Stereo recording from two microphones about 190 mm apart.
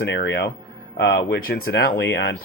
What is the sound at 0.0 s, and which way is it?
Speech, 65° left (ahead or behind).